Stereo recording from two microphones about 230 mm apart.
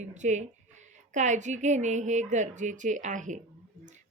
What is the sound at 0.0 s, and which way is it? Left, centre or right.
Speech, right.